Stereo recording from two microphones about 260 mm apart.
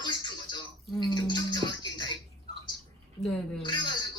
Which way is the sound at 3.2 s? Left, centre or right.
Centre.